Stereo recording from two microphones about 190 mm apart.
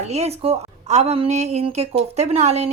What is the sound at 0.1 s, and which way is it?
A woman's voice, 35° right (ahead or behind).